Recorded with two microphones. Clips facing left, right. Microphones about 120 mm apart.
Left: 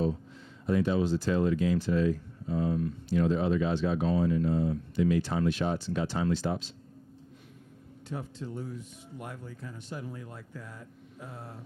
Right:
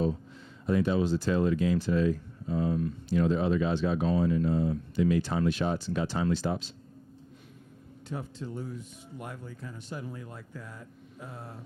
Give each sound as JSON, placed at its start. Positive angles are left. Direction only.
{"t": 0.6, "sound": "speech", "side_deg": -20}
{"t": 8.1, "sound": "speech", "side_deg": -25}